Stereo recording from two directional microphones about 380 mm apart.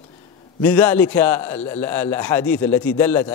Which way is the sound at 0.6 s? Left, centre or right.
Centre.